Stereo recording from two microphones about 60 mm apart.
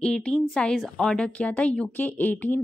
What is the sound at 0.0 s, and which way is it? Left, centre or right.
A woman's voice, centre.